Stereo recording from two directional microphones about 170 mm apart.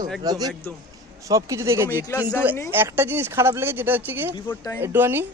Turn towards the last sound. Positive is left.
turn(degrees=-15)  # may be behind; listen again after turning